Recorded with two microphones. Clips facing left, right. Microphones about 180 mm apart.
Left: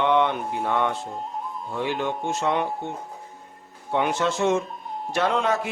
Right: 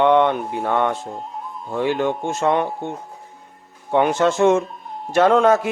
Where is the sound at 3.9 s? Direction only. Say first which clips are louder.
Right 6 dB; 50° right (ahead or behind).